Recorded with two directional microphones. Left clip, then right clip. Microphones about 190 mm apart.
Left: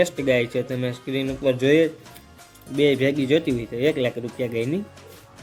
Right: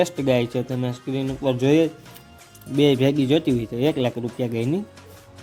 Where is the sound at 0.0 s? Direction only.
30° right (ahead or behind).